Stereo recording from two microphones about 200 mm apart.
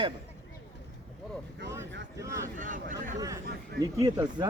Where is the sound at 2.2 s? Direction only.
15° right (ahead or behind).